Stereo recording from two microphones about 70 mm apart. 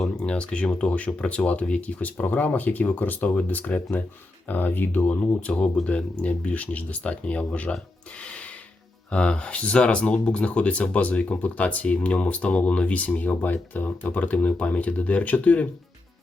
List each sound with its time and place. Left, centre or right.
0.2 s speech: centre
9.0 s speech: centre